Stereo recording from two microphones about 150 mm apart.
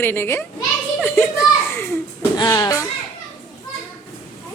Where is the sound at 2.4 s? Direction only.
20° left (ahead or behind).